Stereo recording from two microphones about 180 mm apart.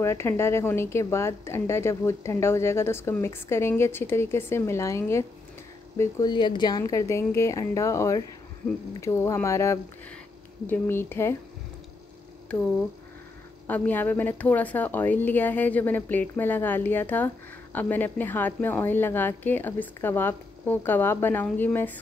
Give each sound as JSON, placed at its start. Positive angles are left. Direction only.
{"t": 0.0, "sound": "a woman's voice", "side_deg": 15}
{"t": 13.7, "sound": "a woman's voice", "side_deg": 10}